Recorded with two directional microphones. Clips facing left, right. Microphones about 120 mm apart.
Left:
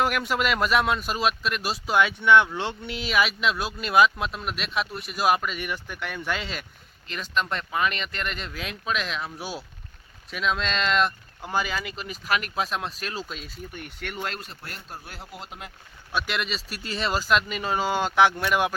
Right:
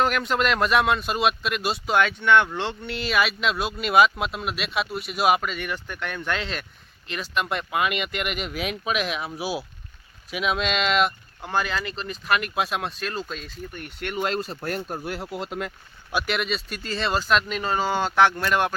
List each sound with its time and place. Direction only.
0.0 s speech: 10° left (ahead or behind)
5.5 s speech: 5° left (ahead or behind)
11.4 s speech: 5° left (ahead or behind)
14.3 s speech: 35° right (ahead or behind)
14.6 s speech: 50° right (ahead or behind); by 15.7 s 75° right (ahead or behind)
16.1 s speech: centre (ahead or behind)